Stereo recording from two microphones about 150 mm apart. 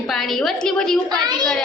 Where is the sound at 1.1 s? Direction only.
30° right (ahead or behind).